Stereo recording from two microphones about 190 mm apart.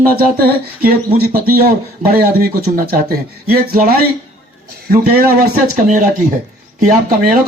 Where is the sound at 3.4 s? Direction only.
55° right (ahead or behind).